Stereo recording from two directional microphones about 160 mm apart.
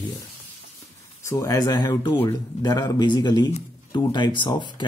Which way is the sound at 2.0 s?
15° left (ahead or behind).